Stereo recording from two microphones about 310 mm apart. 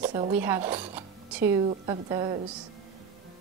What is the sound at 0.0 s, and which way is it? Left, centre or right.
Cutlery, right.